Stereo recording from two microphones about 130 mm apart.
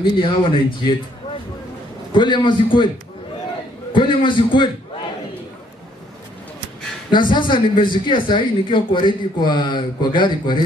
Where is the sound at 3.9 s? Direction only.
40° left (ahead or behind).